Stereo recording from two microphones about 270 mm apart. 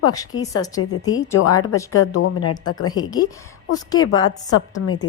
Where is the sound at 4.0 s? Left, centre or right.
Left.